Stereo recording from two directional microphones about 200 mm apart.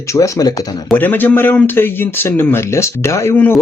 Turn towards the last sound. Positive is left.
turn(degrees=10)  # may be behind; listen again after turning